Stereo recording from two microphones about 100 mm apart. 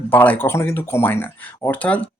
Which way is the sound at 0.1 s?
20° left (ahead or behind).